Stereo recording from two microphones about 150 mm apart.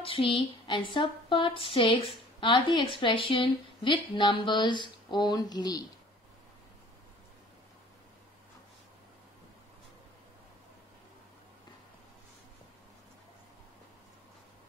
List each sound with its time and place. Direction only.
0.0 s speech: 35° left (ahead or behind)